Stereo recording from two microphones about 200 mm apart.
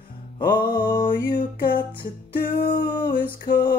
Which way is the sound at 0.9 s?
50° left (ahead or behind).